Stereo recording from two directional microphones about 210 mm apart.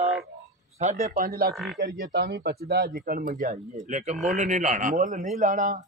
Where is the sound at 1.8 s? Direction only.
55° right (ahead or behind); by 5.8 s 40° right (ahead or behind).